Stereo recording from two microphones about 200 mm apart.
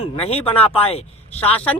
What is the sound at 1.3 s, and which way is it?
Speech, 5° left (ahead or behind).